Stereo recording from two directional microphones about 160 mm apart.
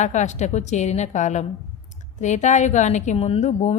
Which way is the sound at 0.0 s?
45° left (ahead or behind).